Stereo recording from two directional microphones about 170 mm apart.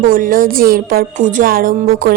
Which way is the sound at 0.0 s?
55° right (ahead or behind).